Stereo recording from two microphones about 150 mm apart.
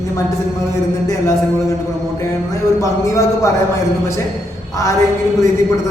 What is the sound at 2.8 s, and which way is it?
Speech, 20° left (ahead or behind).